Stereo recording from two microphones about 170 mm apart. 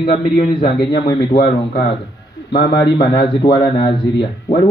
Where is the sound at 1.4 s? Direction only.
75° left (ahead or behind).